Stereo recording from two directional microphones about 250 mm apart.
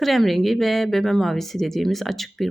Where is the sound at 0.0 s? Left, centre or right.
Centre.